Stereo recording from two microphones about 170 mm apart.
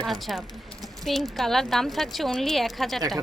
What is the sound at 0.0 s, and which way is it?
Speech, centre (ahead or behind).